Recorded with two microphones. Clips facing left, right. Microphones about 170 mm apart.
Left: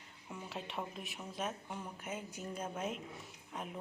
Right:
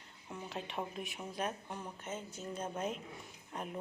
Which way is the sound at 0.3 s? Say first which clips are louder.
Right 2 dB; 5° left (ahead or behind).